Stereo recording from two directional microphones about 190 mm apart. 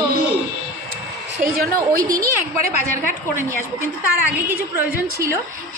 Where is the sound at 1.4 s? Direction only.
50° right (ahead or behind).